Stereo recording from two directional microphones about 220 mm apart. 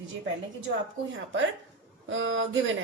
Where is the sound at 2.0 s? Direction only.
60° right (ahead or behind).